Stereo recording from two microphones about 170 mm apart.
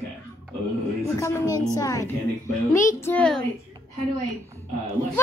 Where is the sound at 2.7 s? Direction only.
15° left (ahead or behind).